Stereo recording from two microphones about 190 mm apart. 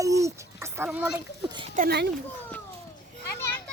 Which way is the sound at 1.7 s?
55° right (ahead or behind).